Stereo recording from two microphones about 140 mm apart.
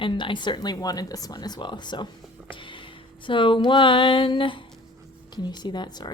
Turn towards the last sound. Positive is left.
turn(degrees=30)  # may be behind; listen again after turning